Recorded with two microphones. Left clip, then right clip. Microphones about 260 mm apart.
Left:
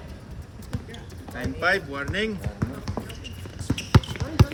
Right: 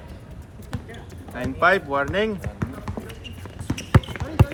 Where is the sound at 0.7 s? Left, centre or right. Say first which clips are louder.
Right 2 dB; centre.